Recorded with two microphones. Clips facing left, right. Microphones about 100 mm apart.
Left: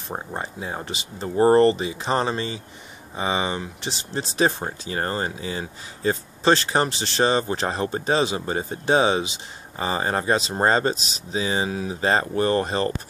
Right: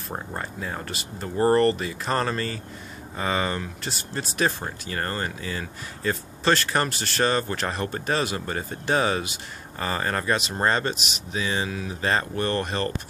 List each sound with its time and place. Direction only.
0.1 s speech: 20° left (ahead or behind)
4.1 s speech: 30° left (ahead or behind)
4.9 s speech: 25° left (ahead or behind)